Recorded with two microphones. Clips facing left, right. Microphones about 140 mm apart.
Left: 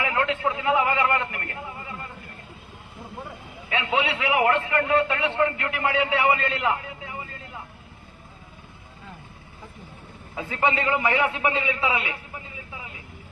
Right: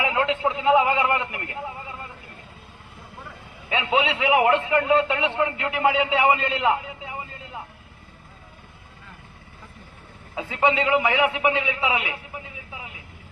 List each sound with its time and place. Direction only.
0.0 s a man's voice: 20° right (ahead or behind)
3.7 s a man's voice: 20° right (ahead or behind)
10.3 s a man's voice: 15° right (ahead or behind)